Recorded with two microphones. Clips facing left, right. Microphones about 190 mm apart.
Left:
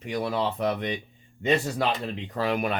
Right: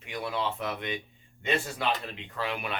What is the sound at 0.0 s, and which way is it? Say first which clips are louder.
A man's voice: left 5 dB; 40° left (ahead or behind).